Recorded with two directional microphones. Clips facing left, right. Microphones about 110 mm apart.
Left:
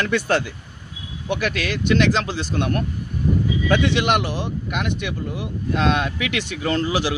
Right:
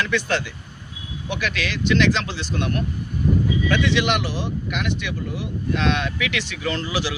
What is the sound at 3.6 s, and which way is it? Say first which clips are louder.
Speech: left 4 dB; 40° left (ahead or behind).